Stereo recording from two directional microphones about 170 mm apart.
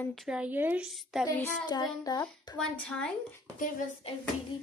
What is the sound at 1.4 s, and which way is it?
Child singing, 25° left (ahead or behind).